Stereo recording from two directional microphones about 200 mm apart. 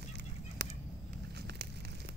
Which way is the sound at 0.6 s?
60° right (ahead or behind).